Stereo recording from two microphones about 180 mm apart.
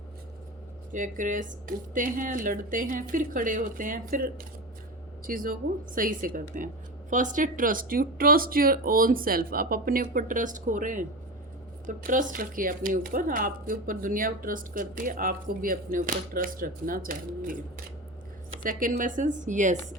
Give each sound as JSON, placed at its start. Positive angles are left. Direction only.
{"t": 0.9, "sound": "speech", "side_deg": -45}
{"t": 18.6, "sound": "speech", "side_deg": -45}